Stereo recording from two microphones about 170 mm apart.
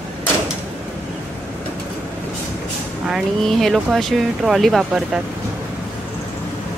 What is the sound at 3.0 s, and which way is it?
Speech, centre (ahead or behind).